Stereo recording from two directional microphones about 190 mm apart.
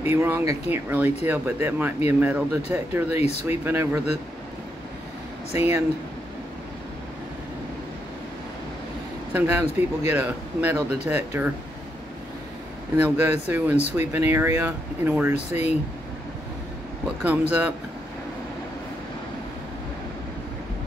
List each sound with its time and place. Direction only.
0.0 s speech: 10° right (ahead or behind)
3.2 s speech: 35° left (ahead or behind)
3.4 s speech: 10° right (ahead or behind)
5.5 s speech: 15° right (ahead or behind)
9.3 s speech: 10° right (ahead or behind)
12.9 s speech: 10° right (ahead or behind)
15.3 s speech: 35° left (ahead or behind)
17.2 s speech: 10° right (ahead or behind)